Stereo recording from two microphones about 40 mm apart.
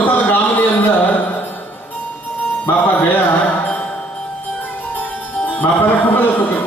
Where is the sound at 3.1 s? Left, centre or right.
Left.